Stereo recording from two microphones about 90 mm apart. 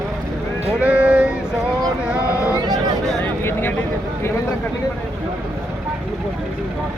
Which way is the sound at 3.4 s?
20° left (ahead or behind).